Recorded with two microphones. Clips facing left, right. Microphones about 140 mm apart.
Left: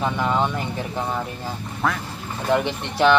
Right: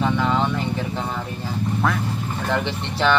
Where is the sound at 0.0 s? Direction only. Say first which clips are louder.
Right 1 dB; 15° left (ahead or behind).